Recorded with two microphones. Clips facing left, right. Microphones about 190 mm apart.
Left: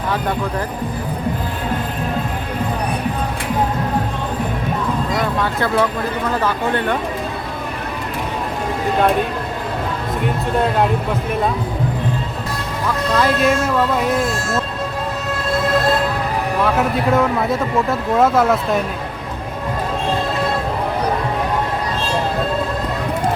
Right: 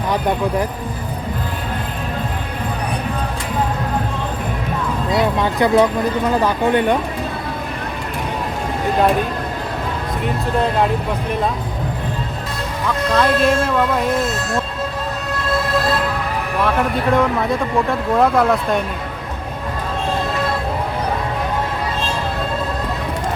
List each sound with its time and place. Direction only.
5.4 s speech: 15° right (ahead or behind)
13.1 s speech: 5° left (ahead or behind)
16.6 s speech: 5° left (ahead or behind)